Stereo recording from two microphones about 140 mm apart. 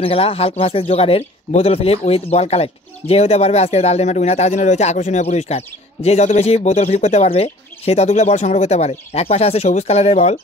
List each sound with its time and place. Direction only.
0.0 s speech: 45° left (ahead or behind)